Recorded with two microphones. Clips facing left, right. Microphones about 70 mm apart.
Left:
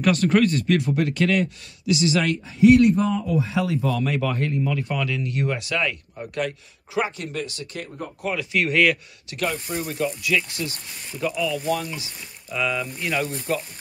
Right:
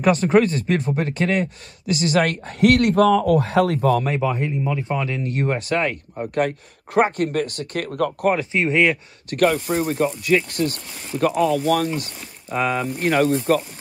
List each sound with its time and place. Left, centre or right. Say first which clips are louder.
0.0 s speech: right 3 dB; right
4.2 s speech: right 2 dB; centre; by 8.3 s right
8.3 s speech: right 2 dB; right
9.3 s speech: right 8 dB; right